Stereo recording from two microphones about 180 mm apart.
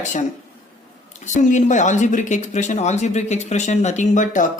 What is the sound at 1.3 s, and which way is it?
Speech, 45° left (ahead or behind).